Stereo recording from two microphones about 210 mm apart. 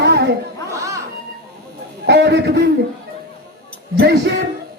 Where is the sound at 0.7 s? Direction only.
15° right (ahead or behind).